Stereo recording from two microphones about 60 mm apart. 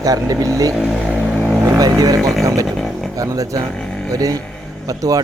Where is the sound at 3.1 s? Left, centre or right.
Right.